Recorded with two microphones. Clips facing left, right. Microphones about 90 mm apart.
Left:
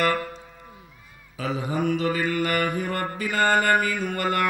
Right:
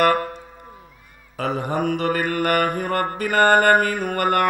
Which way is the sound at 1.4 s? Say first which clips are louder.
Right 3 dB; 60° right (ahead or behind).